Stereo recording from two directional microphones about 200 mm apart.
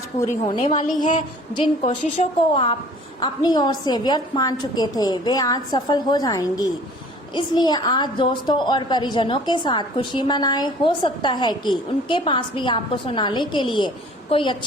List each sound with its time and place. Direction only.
0.4 s a woman's voice: 20° left (ahead or behind)